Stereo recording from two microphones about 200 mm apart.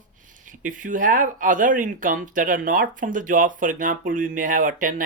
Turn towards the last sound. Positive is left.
turn(degrees=-40)  # may be behind; listen again after turning